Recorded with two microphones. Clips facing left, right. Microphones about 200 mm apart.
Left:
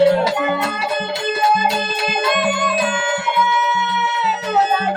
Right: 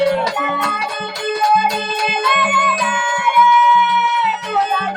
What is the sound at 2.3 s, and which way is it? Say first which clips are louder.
Music: left 3 dB; 45° left (ahead or behind).